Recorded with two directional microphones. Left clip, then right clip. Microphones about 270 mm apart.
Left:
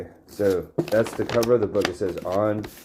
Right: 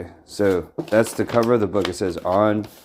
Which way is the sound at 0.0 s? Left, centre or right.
Right.